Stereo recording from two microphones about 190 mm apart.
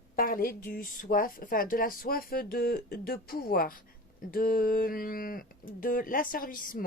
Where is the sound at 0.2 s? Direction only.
50° left (ahead or behind).